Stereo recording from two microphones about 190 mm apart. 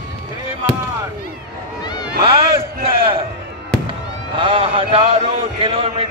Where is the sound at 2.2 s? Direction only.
25° right (ahead or behind).